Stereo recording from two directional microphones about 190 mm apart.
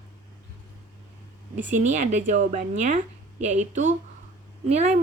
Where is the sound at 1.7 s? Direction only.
40° right (ahead or behind).